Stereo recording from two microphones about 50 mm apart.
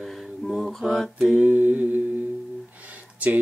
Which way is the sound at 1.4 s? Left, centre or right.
Right.